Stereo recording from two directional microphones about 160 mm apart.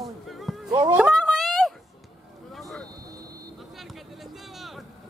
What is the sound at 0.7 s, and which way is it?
Speech, 25° right (ahead or behind).